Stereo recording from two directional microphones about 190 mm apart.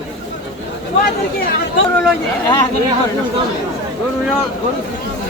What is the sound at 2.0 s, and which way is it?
Speech, 5° left (ahead or behind).